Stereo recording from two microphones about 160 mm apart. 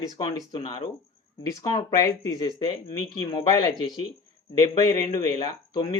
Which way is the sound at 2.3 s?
30° left (ahead or behind).